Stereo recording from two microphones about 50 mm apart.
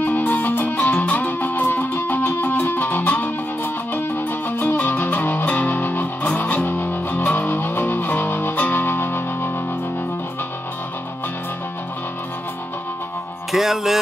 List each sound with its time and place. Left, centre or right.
0.0 s music: left
13.5 s music: centre